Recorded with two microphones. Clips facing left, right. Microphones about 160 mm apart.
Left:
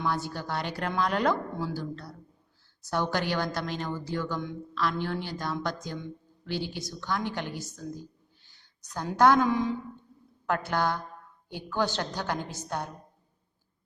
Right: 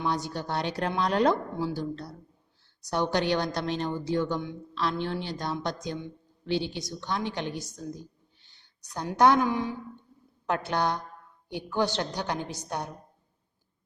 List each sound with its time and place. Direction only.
0.0 s a woman's voice: 20° right (ahead or behind)
8.8 s a woman's voice: 10° right (ahead or behind)
9.5 s a woman's voice: centre (ahead or behind)
10.4 s a woman's voice: 20° right (ahead or behind)